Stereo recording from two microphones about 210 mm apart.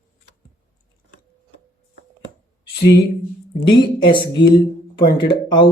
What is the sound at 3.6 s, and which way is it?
Speech, 20° left (ahead or behind).